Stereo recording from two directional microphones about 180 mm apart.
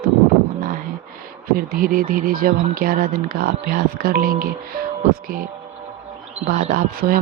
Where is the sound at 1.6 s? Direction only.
50° right (ahead or behind).